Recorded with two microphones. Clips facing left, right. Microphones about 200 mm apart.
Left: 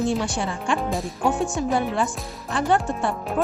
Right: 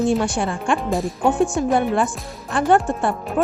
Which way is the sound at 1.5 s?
55° right (ahead or behind).